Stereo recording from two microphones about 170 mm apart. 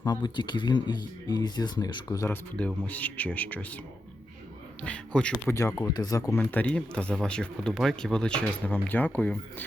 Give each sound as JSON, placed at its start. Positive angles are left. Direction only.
{"t": 0.0, "sound": "speech", "side_deg": 25}
{"t": 2.6, "sound": "speech", "side_deg": 10}
{"t": 4.9, "sound": "speech", "side_deg": 5}
{"t": 5.5, "sound": "speech", "side_deg": 20}
{"t": 6.4, "sound": "speech", "side_deg": 10}